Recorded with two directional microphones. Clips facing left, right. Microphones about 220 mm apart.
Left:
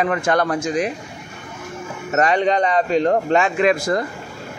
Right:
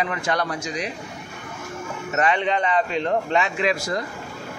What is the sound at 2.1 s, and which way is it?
Speech, 40° left (ahead or behind).